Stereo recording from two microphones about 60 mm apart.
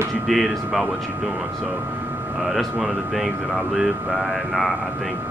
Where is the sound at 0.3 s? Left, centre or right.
Centre.